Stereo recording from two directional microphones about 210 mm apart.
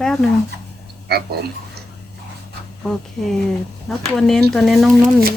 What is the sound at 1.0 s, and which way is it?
Speech, 50° right (ahead or behind).